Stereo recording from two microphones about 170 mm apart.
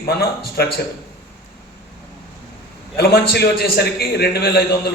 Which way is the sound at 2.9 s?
65° left (ahead or behind).